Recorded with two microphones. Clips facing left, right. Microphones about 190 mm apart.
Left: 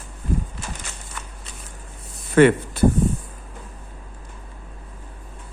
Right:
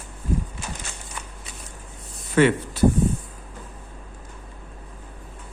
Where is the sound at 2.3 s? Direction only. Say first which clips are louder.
Left 4 dB; 55° left (ahead or behind).